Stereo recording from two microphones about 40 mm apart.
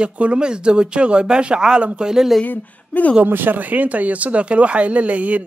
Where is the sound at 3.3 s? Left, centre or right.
Right.